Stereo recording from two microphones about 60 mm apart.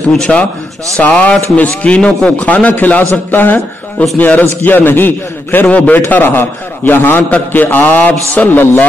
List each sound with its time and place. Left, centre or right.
0.2 s a man's voice: centre; by 5.7 s left
5.7 s a man's voice: left
5.9 s a man's voice: left